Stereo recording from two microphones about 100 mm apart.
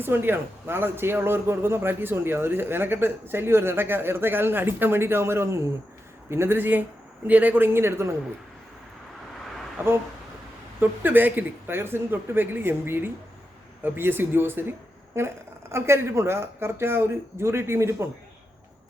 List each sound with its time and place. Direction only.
0.0 s a man's voice: 20° right (ahead or behind)
9.8 s a man's voice: 20° right (ahead or behind)